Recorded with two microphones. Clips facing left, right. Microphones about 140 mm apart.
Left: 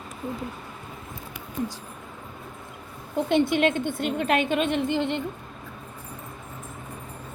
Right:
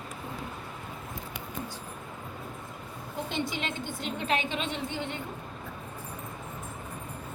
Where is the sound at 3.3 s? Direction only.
60° left (ahead or behind); by 5.2 s 80° left.